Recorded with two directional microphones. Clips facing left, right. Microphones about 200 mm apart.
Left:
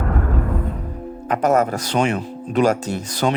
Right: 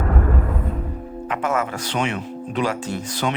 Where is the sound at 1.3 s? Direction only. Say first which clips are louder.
Left 6 dB; 40° left (ahead or behind).